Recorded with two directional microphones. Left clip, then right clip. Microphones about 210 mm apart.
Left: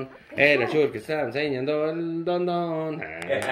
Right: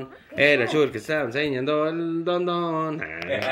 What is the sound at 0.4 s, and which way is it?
Speech, 25° right (ahead or behind).